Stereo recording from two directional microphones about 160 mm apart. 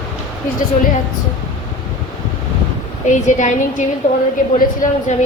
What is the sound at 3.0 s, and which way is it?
Speech, 50° left (ahead or behind).